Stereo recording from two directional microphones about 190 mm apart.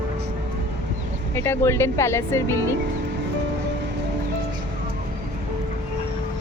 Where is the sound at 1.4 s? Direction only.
15° left (ahead or behind).